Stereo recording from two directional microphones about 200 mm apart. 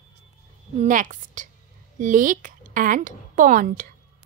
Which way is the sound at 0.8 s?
40° right (ahead or behind).